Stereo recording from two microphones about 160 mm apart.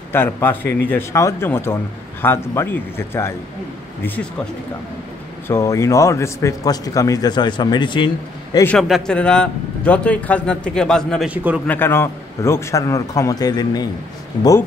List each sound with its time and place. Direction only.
0.1 s speech: 15° left (ahead or behind)
5.5 s speech: 20° left (ahead or behind)
8.6 s a man's voice: centre (ahead or behind)
11.2 s a man's voice: 10° right (ahead or behind)
11.6 s speech: 10° left (ahead or behind)